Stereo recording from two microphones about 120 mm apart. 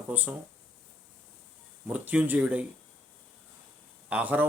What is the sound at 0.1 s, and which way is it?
Speech, 10° right (ahead or behind).